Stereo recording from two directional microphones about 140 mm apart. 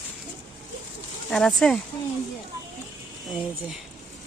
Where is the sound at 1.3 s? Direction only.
5° left (ahead or behind).